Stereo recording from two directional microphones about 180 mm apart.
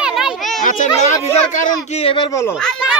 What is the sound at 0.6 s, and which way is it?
Children playing, 45° left (ahead or behind).